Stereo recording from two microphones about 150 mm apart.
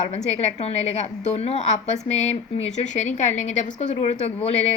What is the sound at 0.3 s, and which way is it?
A woman's voice, 45° left (ahead or behind).